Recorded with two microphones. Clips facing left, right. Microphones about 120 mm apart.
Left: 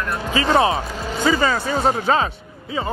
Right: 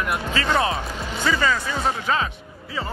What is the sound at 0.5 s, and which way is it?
Speech, 25° left (ahead or behind).